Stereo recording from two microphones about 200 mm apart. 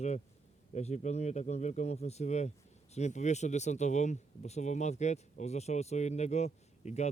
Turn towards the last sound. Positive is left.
turn(degrees=35)  # may be behind; listen again after turning